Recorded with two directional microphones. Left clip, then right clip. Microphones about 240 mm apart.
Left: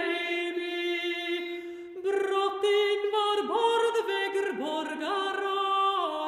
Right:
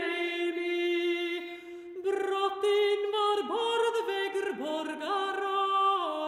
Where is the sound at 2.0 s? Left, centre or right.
Right.